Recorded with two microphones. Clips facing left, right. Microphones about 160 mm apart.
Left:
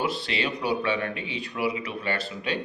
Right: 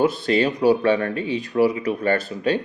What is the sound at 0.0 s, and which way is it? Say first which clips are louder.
Speech: right 9 dB; 45° right (ahead or behind).